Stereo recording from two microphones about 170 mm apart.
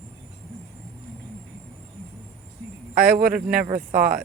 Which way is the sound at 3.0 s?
60° right (ahead or behind).